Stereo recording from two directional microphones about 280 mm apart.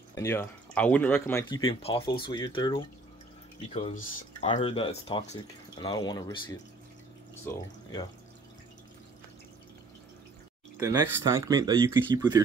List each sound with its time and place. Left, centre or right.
0.1 s speech: centre
7.5 s speech: centre
10.8 s speech: centre